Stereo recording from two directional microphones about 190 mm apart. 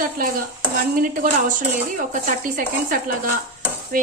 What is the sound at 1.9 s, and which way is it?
Cutlery, 45° right (ahead or behind).